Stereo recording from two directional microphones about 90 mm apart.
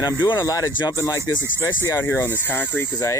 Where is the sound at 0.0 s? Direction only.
55° left (ahead or behind).